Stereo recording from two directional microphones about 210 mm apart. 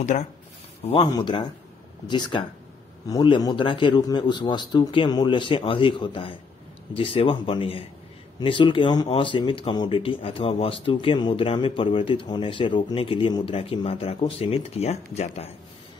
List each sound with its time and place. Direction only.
0.8 s speech: 25° left (ahead or behind)